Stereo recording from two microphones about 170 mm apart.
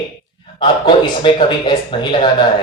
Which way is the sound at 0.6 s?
30° left (ahead or behind).